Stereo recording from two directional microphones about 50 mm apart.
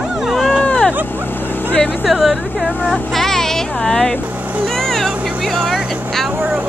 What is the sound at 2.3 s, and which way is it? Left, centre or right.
Speech, centre.